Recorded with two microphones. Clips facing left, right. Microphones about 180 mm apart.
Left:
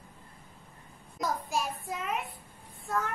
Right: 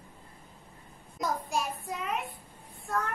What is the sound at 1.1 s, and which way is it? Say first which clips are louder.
A child's voice: even; centre (ahead or behind).